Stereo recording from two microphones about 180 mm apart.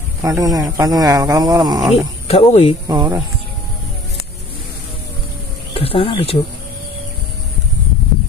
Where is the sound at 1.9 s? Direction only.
35° left (ahead or behind).